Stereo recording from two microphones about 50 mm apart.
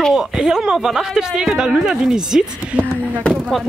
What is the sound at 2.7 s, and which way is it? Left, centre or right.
Speech, right.